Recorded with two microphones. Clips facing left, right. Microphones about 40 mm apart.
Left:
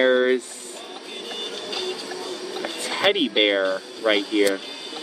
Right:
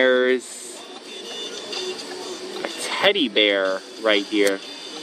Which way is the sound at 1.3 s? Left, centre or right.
Centre.